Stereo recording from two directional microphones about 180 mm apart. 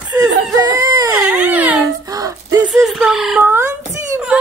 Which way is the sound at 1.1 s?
10° right (ahead or behind).